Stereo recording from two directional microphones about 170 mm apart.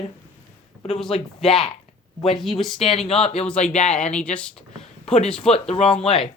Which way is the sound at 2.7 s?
35° left (ahead or behind).